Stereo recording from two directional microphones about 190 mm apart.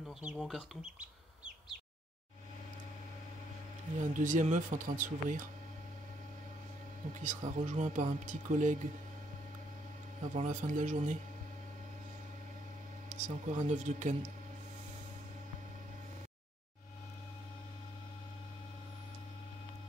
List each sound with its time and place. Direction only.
0.2 s speech: 5° right (ahead or behind)
4.0 s speech: 40° right (ahead or behind)
7.2 s speech: 40° right (ahead or behind)
10.2 s speech: 40° right (ahead or behind)
13.1 s speech: 40° right (ahead or behind)